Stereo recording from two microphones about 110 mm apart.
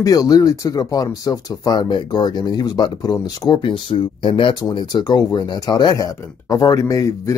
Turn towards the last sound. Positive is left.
turn(degrees=30)  # may be behind; listen again after turning